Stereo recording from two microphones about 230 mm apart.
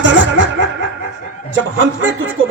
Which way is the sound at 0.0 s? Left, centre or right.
Right.